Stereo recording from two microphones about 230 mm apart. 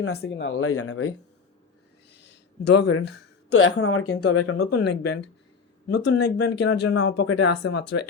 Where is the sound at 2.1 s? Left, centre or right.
Left.